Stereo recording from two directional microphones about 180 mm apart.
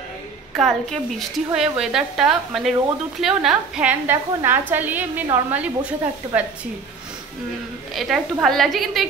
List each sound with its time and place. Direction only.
0.6 s a woman's voice: centre (ahead or behind)
6.2 s speech: 25° right (ahead or behind)
7.9 s a woman's voice: centre (ahead or behind)